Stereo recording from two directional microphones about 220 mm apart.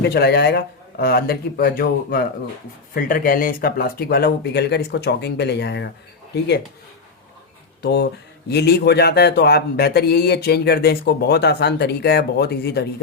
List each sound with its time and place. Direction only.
0.0 s speech: 45° left (ahead or behind)
7.8 s speech: 50° left (ahead or behind)